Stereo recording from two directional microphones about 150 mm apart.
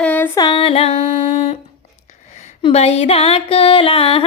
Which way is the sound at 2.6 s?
45° left (ahead or behind).